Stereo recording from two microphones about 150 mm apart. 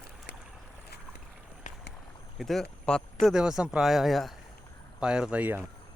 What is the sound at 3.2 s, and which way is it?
Speech, 5° right (ahead or behind).